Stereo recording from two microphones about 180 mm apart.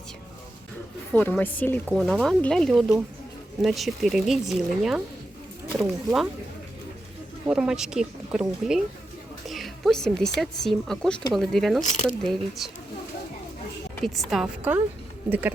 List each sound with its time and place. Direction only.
1.1 s a woman's voice: 10° left (ahead or behind)
7.4 s speech: 5° right (ahead or behind)
11.8 s speech: 40° left (ahead or behind)
12.0 s speech: centre (ahead or behind)
14.0 s speech: centre (ahead or behind)